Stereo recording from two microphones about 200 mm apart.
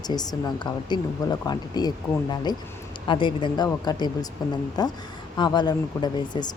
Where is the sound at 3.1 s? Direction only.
25° left (ahead or behind).